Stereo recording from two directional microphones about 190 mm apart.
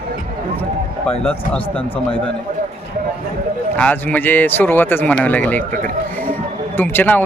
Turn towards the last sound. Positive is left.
turn(degrees=10)  # may be behind; listen again after turning